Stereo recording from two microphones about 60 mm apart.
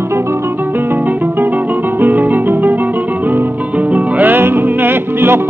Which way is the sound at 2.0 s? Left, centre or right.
Right.